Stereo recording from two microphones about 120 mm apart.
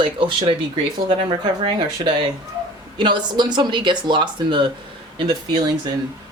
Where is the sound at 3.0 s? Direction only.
40° right (ahead or behind).